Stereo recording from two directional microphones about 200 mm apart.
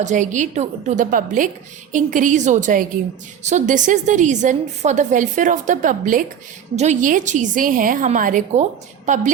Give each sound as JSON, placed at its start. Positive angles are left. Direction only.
{"t": 0.0, "sound": "a woman's voice", "side_deg": -40}